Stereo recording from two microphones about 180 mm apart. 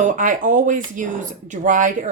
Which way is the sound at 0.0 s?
45° right (ahead or behind).